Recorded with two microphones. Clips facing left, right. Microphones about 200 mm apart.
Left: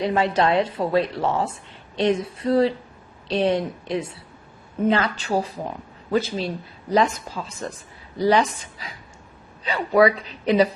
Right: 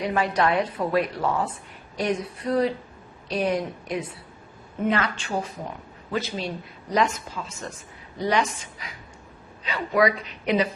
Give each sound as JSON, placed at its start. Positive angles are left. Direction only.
{"t": 0.0, "sound": "a woman's voice", "side_deg": 25}